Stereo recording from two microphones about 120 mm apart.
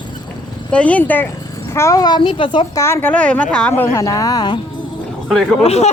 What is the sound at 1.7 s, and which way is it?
Speech, 25° left (ahead or behind).